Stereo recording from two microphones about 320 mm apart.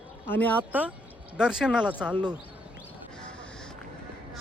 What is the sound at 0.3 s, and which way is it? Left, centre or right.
A man's voice, centre.